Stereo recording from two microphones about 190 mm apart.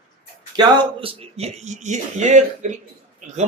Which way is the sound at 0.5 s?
25° right (ahead or behind).